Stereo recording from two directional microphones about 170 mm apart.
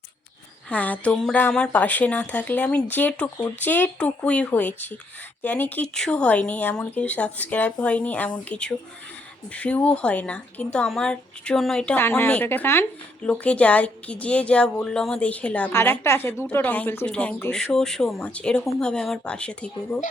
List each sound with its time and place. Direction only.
0.7 s speech: 10° left (ahead or behind)